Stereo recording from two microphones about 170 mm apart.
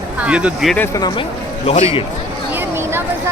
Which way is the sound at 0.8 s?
20° left (ahead or behind).